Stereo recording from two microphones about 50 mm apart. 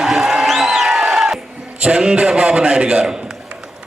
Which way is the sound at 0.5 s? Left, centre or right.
Centre.